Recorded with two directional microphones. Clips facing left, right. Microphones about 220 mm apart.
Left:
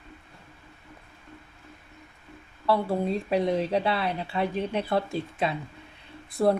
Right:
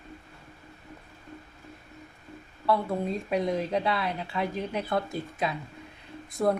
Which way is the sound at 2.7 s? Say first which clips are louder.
Left 2 dB; 30° left (ahead or behind).